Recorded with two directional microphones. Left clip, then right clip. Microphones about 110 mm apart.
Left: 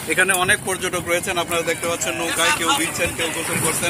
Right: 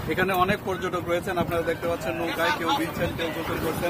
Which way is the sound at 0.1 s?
5° left (ahead or behind).